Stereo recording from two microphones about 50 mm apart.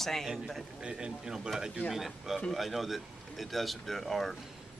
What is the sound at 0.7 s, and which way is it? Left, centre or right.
Speech, centre.